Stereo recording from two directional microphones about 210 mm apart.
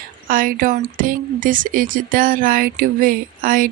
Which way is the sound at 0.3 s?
40° right (ahead or behind).